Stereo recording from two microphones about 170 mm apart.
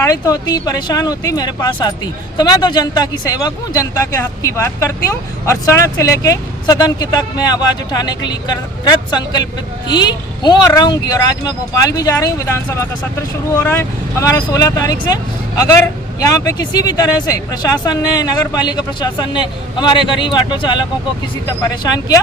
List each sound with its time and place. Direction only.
0.0 s speech: 20° left (ahead or behind)